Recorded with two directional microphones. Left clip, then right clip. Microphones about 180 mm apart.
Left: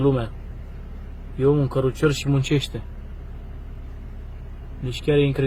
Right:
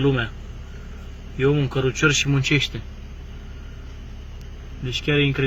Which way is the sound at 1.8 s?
45° left (ahead or behind).